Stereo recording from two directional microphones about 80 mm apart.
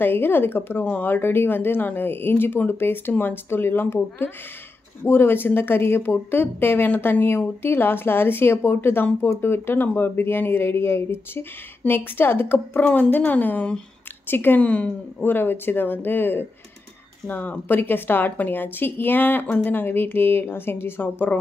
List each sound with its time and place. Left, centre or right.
0.0 s a woman's voice: left